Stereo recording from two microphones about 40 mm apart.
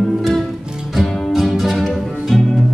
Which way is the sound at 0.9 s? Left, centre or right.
Centre.